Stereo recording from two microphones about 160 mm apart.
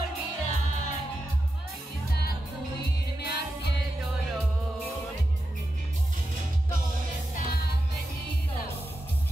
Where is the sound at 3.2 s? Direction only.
90° left.